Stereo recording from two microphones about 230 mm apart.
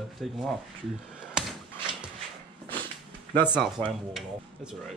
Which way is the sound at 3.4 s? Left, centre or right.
Centre.